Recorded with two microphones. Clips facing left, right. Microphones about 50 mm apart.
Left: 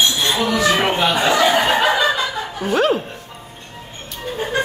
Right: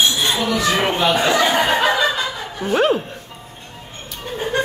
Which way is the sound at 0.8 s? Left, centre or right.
Centre.